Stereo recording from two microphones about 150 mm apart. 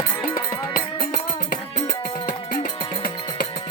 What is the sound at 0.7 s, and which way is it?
Music, 75° left (ahead or behind).